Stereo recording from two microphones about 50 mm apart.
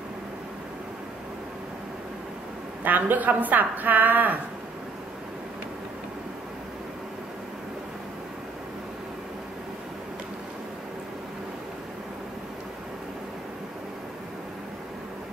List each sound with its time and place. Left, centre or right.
2.8 s a woman's voice: right